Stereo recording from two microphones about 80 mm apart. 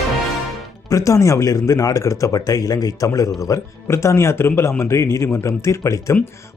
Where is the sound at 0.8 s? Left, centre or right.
Left.